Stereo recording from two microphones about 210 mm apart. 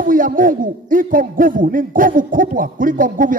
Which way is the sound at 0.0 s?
40° right (ahead or behind).